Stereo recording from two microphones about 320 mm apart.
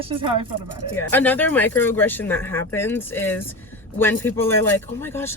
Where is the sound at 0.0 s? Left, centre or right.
Centre.